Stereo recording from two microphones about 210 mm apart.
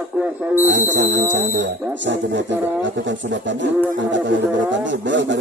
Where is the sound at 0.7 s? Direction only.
60° right (ahead or behind).